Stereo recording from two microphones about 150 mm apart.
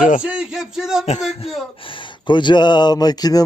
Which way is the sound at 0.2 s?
5° right (ahead or behind).